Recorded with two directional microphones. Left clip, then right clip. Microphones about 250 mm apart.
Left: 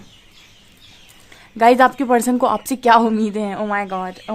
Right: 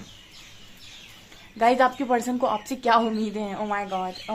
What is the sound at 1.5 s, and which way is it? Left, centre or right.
Speech, left.